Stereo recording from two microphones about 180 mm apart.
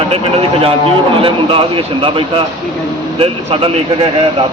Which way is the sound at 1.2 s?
30° right (ahead or behind).